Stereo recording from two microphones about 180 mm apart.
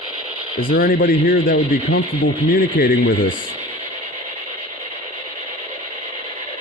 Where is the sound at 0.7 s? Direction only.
55° left (ahead or behind).